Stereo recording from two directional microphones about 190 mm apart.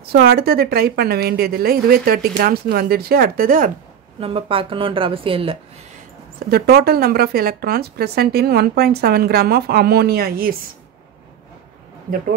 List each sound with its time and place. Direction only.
0.1 s a woman's voice: 55° right (ahead or behind)
4.2 s speech: 30° right (ahead or behind)
6.5 s a woman's voice: 55° right (ahead or behind)